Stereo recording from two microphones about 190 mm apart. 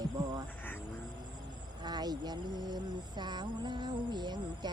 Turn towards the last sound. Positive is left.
turn(degrees=-20)  # may be behind; listen again after turning